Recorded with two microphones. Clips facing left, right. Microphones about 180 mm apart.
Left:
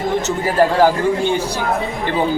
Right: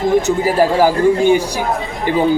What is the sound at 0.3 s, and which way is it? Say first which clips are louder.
Speech: right 2 dB; 10° right (ahead or behind).